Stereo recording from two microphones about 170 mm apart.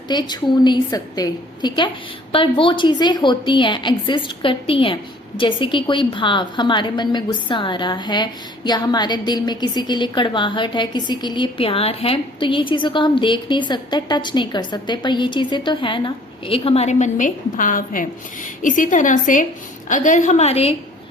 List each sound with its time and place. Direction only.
0.1 s a woman's voice: 25° left (ahead or behind)